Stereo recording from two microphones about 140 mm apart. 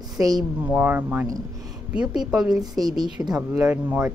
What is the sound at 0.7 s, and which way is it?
A woman's voice, 15° right (ahead or behind).